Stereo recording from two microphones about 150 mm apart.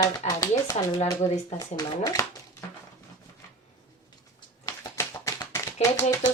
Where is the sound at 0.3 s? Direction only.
20° left (ahead or behind).